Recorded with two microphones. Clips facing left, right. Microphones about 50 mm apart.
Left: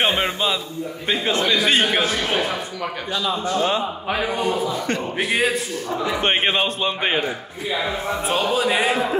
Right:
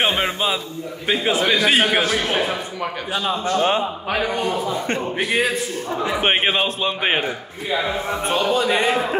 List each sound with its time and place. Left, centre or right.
1.0 s a man's voice: centre
2.3 s speech: centre
3.4 s a man's voice: right
4.1 s a man's voice: centre
4.6 s a man's voice: right
5.1 s a man's voice: centre
8.3 s a man's voice: centre